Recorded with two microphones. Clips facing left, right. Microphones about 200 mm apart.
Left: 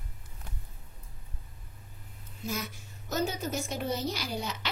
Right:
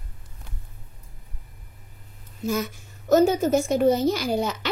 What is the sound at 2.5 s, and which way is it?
A woman's voice, 50° right (ahead or behind).